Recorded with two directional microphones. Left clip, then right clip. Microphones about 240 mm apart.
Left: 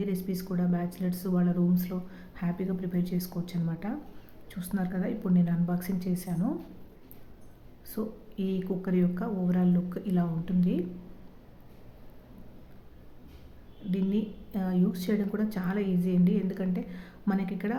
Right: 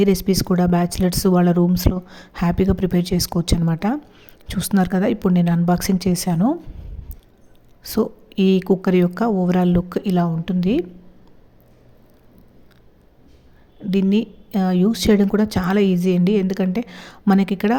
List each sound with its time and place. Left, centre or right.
0.0 s speech: right
7.9 s speech: right
13.9 s speech: right